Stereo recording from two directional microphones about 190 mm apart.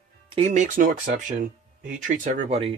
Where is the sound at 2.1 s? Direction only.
30° right (ahead or behind).